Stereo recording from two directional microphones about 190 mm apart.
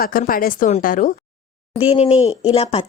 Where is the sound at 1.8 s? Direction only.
30° left (ahead or behind).